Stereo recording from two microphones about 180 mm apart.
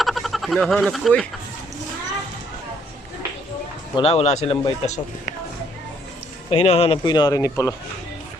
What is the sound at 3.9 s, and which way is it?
Speech, 35° left (ahead or behind).